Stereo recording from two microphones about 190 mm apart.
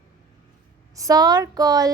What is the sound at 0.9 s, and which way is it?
Speech, 20° right (ahead or behind).